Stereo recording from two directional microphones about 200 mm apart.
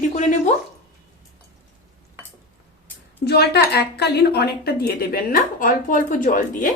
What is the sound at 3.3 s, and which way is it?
A woman's voice, 55° left (ahead or behind).